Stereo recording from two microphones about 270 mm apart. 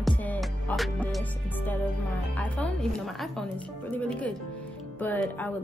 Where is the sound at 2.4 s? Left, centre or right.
Centre.